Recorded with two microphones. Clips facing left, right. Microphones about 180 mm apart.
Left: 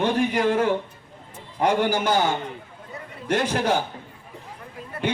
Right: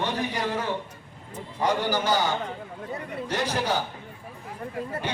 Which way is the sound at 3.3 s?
55° left (ahead or behind).